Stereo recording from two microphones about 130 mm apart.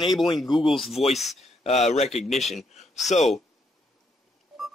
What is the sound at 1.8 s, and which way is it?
Speech, 55° left (ahead or behind).